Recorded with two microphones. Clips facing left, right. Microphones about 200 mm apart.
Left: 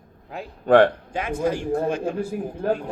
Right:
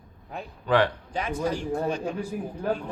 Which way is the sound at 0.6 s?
50° left (ahead or behind).